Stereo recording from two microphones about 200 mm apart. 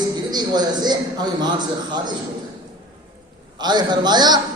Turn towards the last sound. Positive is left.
turn(degrees=-20)  # may be behind; listen again after turning